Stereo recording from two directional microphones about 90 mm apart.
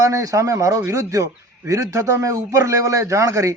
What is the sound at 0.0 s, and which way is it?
A man's voice, 35° right (ahead or behind).